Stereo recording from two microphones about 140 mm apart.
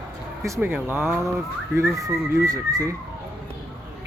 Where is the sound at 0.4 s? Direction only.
20° right (ahead or behind).